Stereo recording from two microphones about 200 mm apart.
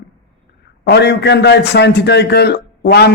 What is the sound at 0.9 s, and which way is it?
A man's voice, 55° left (ahead or behind).